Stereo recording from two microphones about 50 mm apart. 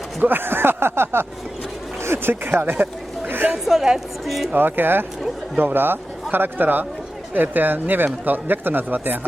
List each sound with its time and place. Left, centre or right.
0.2 s speech: right
3.5 s a woman's voice: centre
4.5 s speech: right